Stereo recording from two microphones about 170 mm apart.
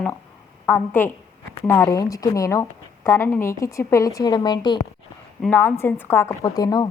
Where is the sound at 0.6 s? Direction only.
10° left (ahead or behind).